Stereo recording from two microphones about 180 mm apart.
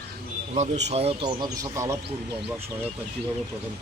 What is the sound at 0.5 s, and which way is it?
Speech, 40° right (ahead or behind).